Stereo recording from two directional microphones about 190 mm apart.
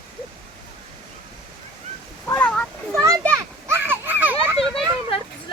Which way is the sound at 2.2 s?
5° left (ahead or behind).